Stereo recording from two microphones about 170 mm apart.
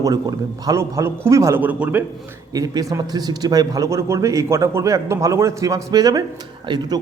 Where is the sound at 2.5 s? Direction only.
20° right (ahead or behind).